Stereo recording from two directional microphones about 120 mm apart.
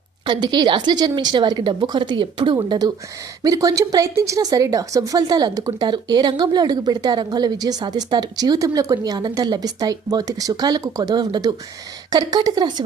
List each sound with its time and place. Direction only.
0.3 s speech: 35° right (ahead or behind)